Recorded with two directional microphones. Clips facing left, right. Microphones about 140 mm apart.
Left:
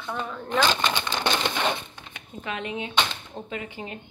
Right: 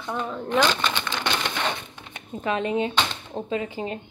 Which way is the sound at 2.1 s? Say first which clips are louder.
Right 7 dB; 40° right (ahead or behind).